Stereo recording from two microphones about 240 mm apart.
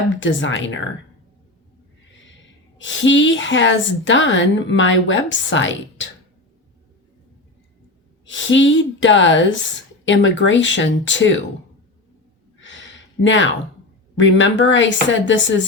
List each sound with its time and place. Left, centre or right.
0.2 s a woman's voice: left
2.7 s a woman's voice: left
8.2 s a woman's voice: left
12.5 s a sound: left
14.2 s a woman's voice: left